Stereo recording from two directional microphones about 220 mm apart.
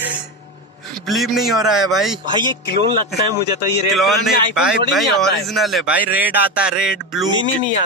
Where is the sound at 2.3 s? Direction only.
20° right (ahead or behind).